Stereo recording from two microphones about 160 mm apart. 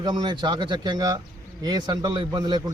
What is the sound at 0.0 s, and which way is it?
A man's voice, 25° right (ahead or behind).